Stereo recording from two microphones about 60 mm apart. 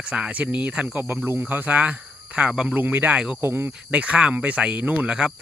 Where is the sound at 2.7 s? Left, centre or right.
Right.